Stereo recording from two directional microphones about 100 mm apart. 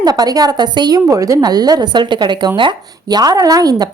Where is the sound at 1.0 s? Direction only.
35° right (ahead or behind).